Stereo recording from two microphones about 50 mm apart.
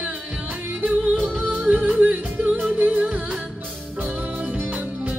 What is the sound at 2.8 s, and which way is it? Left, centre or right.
Music, right.